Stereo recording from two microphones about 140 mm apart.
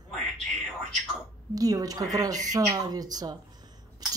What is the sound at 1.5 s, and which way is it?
Speech, 25° right (ahead or behind).